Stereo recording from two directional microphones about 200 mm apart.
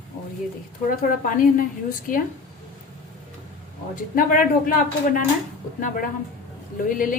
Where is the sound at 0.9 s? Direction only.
45° left (ahead or behind).